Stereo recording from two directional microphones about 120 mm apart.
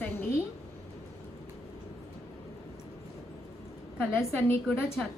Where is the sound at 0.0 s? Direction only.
20° left (ahead or behind).